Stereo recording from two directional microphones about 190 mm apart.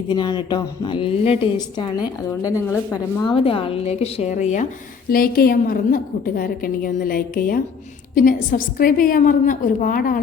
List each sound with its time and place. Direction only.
0.1 s a woman's voice: 25° left (ahead or behind)
3.2 s a woman's voice: 30° left (ahead or behind)
5.1 s a woman's voice: 50° left (ahead or behind)